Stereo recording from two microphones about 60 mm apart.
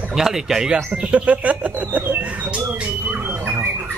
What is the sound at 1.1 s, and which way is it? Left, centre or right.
Speech, right.